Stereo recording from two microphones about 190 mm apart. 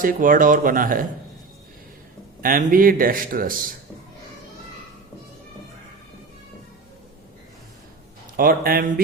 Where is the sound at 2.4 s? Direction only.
50° right (ahead or behind).